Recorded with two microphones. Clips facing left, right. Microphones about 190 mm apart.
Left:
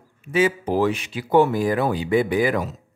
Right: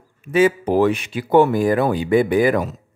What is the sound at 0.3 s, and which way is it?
Speech, 55° right (ahead or behind).